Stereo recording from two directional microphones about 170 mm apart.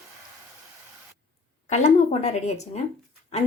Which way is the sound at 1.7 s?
40° left (ahead or behind).